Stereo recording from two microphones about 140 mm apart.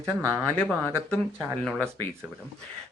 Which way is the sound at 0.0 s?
25° right (ahead or behind).